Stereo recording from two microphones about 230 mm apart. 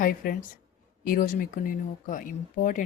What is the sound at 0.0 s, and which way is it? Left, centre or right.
Speech, left.